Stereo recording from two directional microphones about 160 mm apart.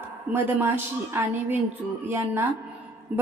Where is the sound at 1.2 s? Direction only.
15° right (ahead or behind).